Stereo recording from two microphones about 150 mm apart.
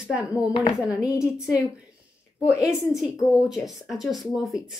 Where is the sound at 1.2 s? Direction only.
5° right (ahead or behind).